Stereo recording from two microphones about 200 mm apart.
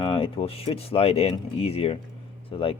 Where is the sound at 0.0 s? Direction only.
25° left (ahead or behind).